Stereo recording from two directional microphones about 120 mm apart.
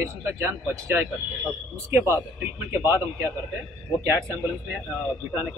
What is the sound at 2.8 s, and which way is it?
Speech, 25° right (ahead or behind).